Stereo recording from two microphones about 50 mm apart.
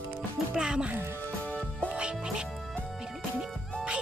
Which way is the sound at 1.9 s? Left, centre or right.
Right.